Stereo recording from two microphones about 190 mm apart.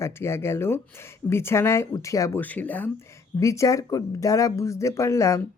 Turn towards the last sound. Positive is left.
turn(degrees=15)  # may be behind; listen again after turning